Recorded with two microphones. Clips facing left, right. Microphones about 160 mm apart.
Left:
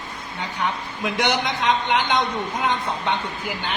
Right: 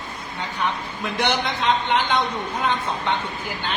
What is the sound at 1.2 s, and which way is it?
Speech, 15° left (ahead or behind).